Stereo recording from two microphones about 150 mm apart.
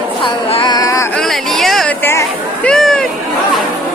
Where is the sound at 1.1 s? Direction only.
Centre (ahead or behind).